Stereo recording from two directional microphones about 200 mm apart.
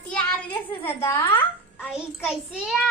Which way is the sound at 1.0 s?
10° left (ahead or behind).